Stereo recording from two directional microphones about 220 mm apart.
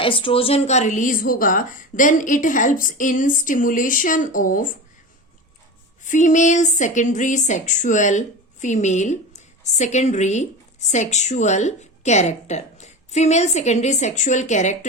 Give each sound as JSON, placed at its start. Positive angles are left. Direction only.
{"t": 0.0, "sound": "a woman's voice", "side_deg": 25}
{"t": 6.1, "sound": "a woman's voice", "side_deg": 35}